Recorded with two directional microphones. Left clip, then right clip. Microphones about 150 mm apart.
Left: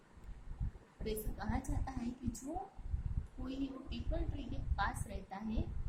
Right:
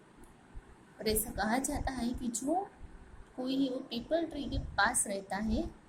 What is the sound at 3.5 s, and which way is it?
A woman's voice, 25° right (ahead or behind).